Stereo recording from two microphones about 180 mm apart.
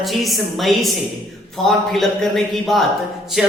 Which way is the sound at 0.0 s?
Centre (ahead or behind).